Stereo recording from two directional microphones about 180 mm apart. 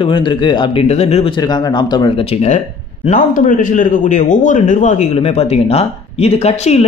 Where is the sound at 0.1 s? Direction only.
30° left (ahead or behind).